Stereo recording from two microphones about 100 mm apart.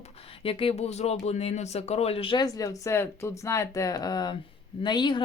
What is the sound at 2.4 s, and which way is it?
Speech, 35° left (ahead or behind).